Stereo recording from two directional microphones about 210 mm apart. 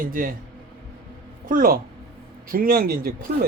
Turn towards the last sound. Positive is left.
turn(degrees=-45)  # may be behind; listen again after turning